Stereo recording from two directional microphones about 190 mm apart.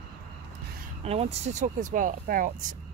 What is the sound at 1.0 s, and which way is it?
Speech, 35° right (ahead or behind).